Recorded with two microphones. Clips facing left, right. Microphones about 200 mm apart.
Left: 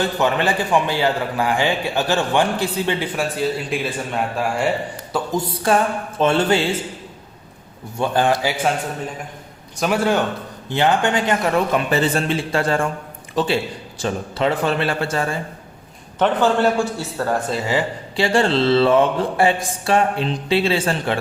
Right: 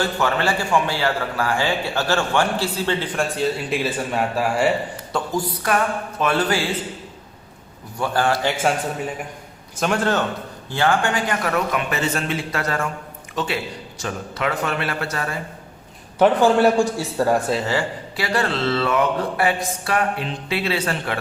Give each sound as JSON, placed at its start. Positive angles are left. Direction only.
{"t": 0.0, "sound": "a man's voice", "side_deg": 20}
{"t": 3.2, "sound": "a man's voice", "side_deg": 0}
{"t": 5.3, "sound": "speech", "side_deg": 25}
{"t": 7.9, "sound": "speech", "side_deg": 20}
{"t": 8.4, "sound": "a man's voice", "side_deg": 5}
{"t": 9.8, "sound": "a man's voice", "side_deg": 5}
{"t": 16.1, "sound": "a man's voice", "side_deg": -10}
{"t": 17.7, "sound": "speech", "side_deg": 20}